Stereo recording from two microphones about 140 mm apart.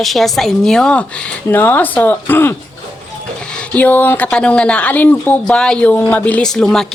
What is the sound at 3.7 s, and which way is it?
A woman's voice, 10° left (ahead or behind).